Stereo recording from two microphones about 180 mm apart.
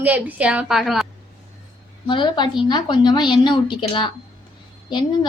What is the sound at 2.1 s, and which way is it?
A woman's voice, 25° left (ahead or behind).